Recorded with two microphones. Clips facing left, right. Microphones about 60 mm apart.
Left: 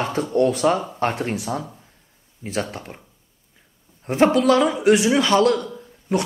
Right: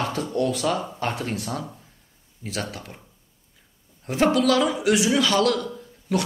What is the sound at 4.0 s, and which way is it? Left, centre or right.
A woman's voice, left.